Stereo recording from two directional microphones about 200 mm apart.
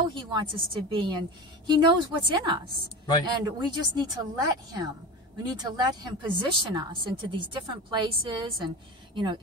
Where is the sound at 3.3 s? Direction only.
20° right (ahead or behind).